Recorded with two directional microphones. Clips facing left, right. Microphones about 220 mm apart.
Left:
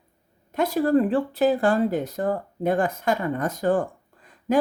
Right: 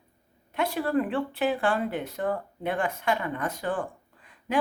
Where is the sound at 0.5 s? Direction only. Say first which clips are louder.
Left 6 dB; 40° left (ahead or behind).